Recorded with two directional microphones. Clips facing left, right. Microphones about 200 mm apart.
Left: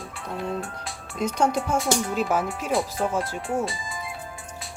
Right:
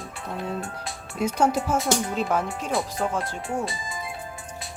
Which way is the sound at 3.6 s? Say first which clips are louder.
Left 1 dB; 20° right (ahead or behind).